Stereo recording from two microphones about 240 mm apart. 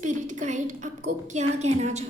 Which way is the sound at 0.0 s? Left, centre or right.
Right.